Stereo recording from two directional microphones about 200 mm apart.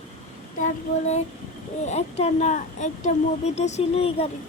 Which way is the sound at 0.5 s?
35° left (ahead or behind).